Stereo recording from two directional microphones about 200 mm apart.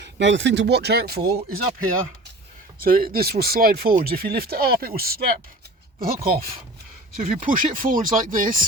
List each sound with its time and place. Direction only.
0.0 s speech: 65° right (ahead or behind)
2.8 s speech: 45° right (ahead or behind)